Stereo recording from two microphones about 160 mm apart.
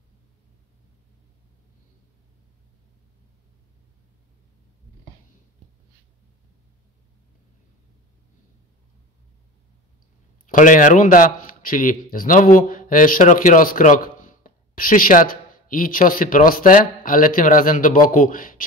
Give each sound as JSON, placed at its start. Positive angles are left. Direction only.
{"t": 10.4, "sound": "a man's voice", "side_deg": 55}